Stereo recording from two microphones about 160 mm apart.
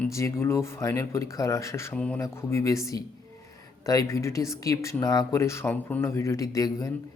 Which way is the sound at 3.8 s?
20° left (ahead or behind).